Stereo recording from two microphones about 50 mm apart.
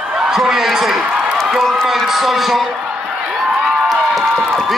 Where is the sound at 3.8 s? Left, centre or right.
Centre.